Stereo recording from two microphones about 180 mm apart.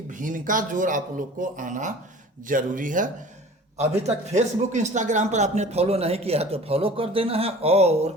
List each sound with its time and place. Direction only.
0.1 s speech: 45° right (ahead or behind)